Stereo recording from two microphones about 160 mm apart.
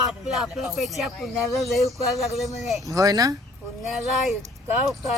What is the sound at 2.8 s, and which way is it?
Speech, 20° right (ahead or behind).